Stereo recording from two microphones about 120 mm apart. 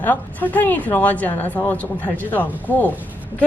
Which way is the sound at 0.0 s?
15° left (ahead or behind).